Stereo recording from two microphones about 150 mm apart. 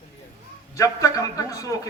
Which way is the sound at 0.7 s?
20° left (ahead or behind).